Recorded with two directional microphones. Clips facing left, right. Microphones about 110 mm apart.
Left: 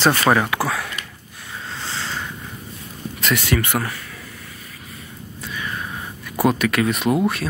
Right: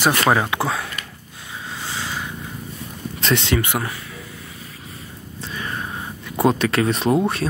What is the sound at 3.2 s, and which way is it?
Speech, 30° right (ahead or behind).